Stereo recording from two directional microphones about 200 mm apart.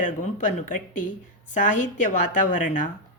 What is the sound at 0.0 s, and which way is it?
Speech, 40° left (ahead or behind).